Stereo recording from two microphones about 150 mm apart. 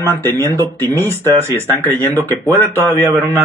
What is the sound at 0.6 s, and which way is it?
Speech, 15° left (ahead or behind).